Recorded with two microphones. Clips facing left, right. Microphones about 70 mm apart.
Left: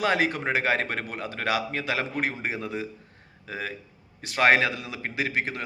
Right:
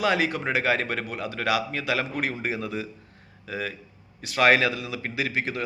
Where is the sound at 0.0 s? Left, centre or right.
Left.